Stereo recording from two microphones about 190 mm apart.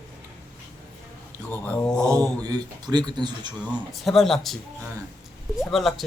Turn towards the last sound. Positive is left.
turn(degrees=0)  # may be behind; listen again after turning